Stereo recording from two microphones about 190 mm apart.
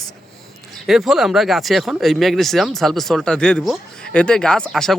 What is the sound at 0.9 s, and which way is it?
Speech, centre (ahead or behind).